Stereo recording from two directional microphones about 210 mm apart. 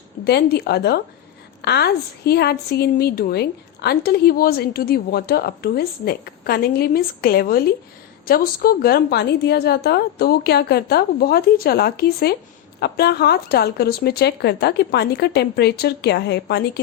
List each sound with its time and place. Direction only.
0.3 s a woman's voice: 50° left (ahead or behind)